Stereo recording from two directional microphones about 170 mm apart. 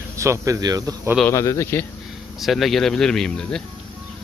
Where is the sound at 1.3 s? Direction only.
15° left (ahead or behind).